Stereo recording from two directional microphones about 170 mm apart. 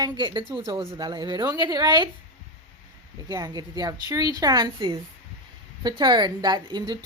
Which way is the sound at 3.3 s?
20° right (ahead or behind).